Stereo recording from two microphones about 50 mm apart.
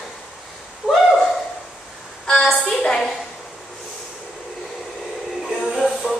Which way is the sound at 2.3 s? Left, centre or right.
Centre.